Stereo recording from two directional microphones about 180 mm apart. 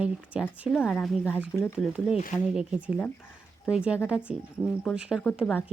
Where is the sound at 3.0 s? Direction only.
10° left (ahead or behind).